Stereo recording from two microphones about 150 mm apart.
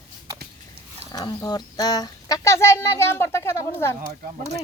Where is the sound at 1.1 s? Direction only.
25° left (ahead or behind).